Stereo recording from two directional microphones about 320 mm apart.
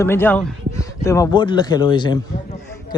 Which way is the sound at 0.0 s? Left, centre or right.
Centre.